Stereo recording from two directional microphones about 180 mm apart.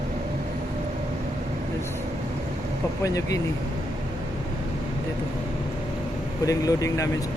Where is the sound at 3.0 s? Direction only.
20° left (ahead or behind).